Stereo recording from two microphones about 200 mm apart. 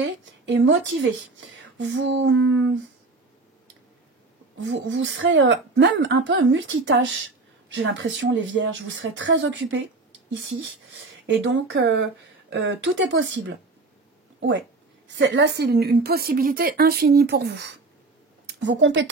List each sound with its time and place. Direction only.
0.0 s a woman's voice: 70° right (ahead or behind)
4.6 s a woman's voice: 65° right (ahead or behind)
15.0 s a woman's voice: 65° right (ahead or behind)